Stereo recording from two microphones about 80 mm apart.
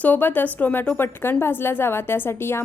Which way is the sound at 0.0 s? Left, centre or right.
Left.